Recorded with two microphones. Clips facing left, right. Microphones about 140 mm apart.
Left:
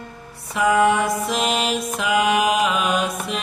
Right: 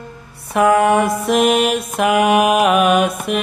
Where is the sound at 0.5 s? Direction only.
60° right (ahead or behind).